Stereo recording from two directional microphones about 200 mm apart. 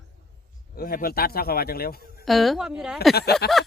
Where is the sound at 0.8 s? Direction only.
50° left (ahead or behind).